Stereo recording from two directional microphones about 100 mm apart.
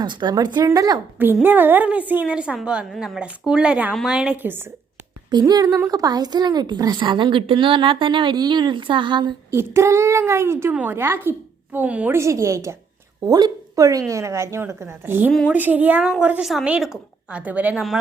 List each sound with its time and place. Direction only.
0.0 s a woman's voice: 50° right (ahead or behind)
1.2 s a woman's voice: 20° right (ahead or behind)
5.3 s a woman's voice: 40° right (ahead or behind)
9.5 s a woman's voice: 25° right (ahead or behind)
12.1 s a woman's voice: 30° right (ahead or behind)
13.2 s a woman's voice: 40° right (ahead or behind); by 17.8 s 15° right (ahead or behind)